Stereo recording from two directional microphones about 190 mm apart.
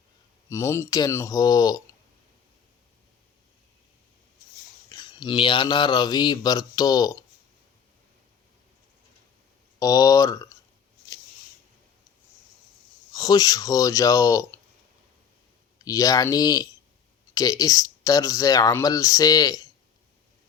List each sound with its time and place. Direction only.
0.5 s speech: 15° left (ahead or behind)
4.9 s speech: 25° left (ahead or behind)
9.7 s speech: 20° left (ahead or behind)
13.1 s speech: 20° left (ahead or behind)
15.8 s speech: 20° left (ahead or behind)